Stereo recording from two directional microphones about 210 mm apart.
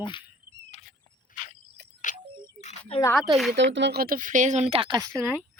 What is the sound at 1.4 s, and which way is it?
Cricket, 40° left (ahead or behind).